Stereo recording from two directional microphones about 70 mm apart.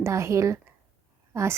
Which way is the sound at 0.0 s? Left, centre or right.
Right.